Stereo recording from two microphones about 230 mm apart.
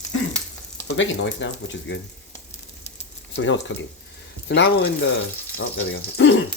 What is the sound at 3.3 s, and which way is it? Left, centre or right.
Speech, left.